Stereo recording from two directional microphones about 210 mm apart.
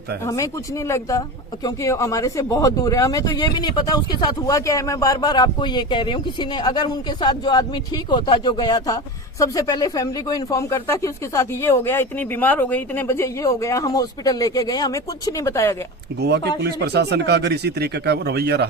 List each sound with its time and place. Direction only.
0.3 s speech: 15° left (ahead or behind)
16.6 s speech: 50° right (ahead or behind)